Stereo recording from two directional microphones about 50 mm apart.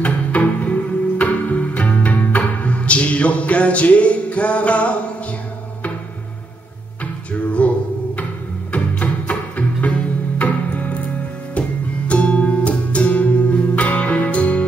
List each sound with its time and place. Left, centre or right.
0.0 s music: left
7.6 s music: left
12.1 s music: left